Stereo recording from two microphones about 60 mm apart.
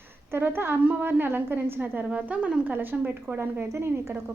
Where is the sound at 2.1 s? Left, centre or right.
Right.